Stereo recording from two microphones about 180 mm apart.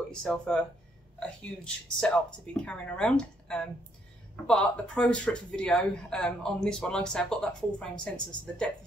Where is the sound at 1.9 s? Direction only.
5° left (ahead or behind).